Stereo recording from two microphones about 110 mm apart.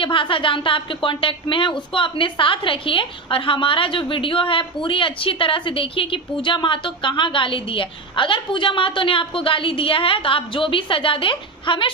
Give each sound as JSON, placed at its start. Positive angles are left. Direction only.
{"t": 0.0, "sound": "a woman's voice", "side_deg": 50}